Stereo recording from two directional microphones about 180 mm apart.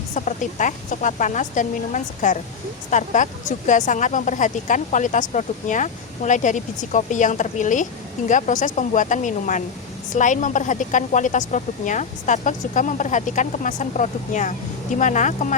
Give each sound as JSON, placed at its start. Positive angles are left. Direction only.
{"t": 0.1, "sound": "speech", "side_deg": 45}